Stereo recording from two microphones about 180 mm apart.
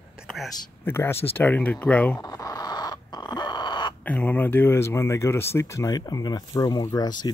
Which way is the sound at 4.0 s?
10° left (ahead or behind).